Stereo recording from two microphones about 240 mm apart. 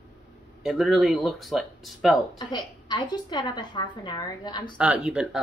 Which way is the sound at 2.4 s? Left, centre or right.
Centre.